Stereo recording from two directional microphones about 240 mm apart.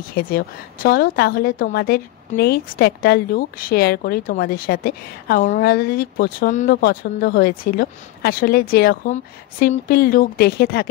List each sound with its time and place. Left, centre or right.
0.1 s a woman's voice: left